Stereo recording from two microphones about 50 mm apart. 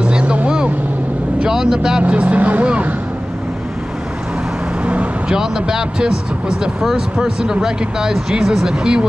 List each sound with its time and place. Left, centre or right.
0.0 s vehicle: right
1.4 s speech: centre
2.0 s speech: right
4.8 s vehicle: right
5.4 s speech: centre
7.2 s speech: centre